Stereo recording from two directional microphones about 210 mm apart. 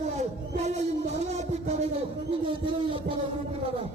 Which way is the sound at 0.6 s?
30° right (ahead or behind).